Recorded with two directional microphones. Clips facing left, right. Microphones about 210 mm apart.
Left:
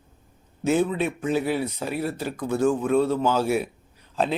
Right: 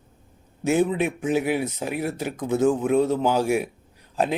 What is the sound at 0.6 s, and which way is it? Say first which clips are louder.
Speech: right 1 dB; 15° right (ahead or behind).